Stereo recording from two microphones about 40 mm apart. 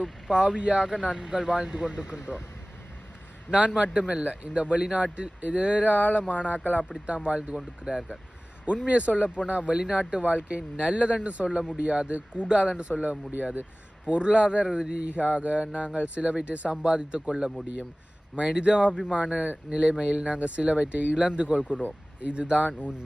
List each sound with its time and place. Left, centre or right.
0.0 s speech: centre
3.9 s speech: right